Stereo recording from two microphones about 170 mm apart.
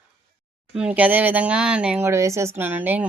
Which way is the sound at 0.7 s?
5° right (ahead or behind).